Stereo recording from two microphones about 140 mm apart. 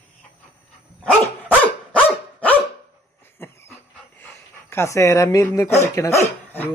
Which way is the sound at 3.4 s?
15° left (ahead or behind).